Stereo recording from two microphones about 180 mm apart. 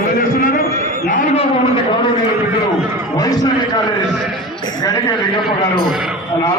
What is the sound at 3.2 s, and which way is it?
Speech, 20° left (ahead or behind).